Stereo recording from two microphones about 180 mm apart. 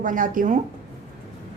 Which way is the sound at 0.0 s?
50° right (ahead or behind).